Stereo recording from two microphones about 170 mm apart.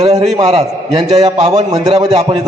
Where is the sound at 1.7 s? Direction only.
20° right (ahead or behind).